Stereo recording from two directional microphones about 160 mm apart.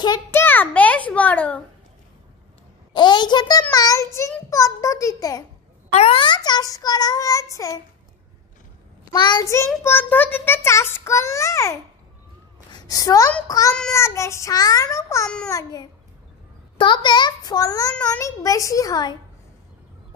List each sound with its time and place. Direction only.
0.0 s a child's voice: 25° left (ahead or behind)
0.4 s a child's voice: 10° left (ahead or behind)
2.9 s a child's voice: 25° left (ahead or behind)
5.9 s a child's voice: 35° left (ahead or behind); by 7.8 s 20° left (ahead or behind)
9.1 s a child's voice: 25° left (ahead or behind)
12.7 s a woman's voice: 20° left (ahead or behind)
15.2 s a child's voice: 5° left (ahead or behind)
15.5 s a child's voice: 25° left (ahead or behind)